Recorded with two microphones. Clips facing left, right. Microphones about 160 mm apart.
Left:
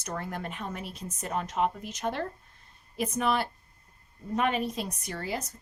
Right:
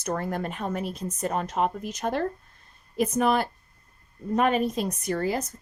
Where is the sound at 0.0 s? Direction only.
45° right (ahead or behind).